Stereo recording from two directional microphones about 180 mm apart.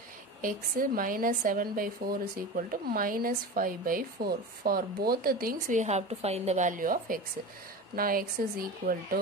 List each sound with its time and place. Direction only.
0.4 s a woman's voice: 50° right (ahead or behind)